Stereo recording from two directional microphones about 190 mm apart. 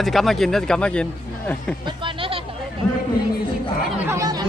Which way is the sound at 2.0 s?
30° right (ahead or behind).